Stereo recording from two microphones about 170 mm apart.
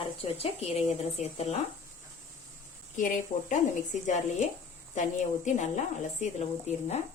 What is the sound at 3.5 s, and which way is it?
A woman's voice, 45° left (ahead or behind).